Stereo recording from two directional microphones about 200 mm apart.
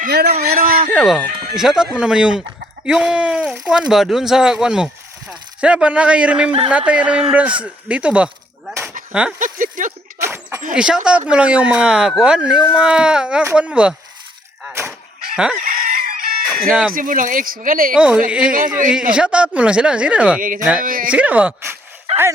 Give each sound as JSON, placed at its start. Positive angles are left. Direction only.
{"t": 0.0, "sound": "speech", "side_deg": -50}
{"t": 0.9, "sound": "a man's voice", "side_deg": 0}
{"t": 9.4, "sound": "speech", "side_deg": -40}
{"t": 10.2, "sound": "a sound", "side_deg": -10}
{"t": 10.8, "sound": "speech", "side_deg": -5}
{"t": 14.6, "sound": "a sound", "side_deg": -10}
{"t": 15.6, "sound": "chicken", "side_deg": -45}
{"t": 16.9, "sound": "speech", "side_deg": -40}
{"t": 17.9, "sound": "speech", "side_deg": -5}
{"t": 20.4, "sound": "speech", "side_deg": -40}
{"t": 21.1, "sound": "speech", "side_deg": -5}
{"t": 22.1, "sound": "dog", "side_deg": -30}